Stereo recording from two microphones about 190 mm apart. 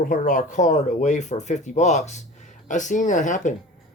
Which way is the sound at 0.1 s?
45° left (ahead or behind).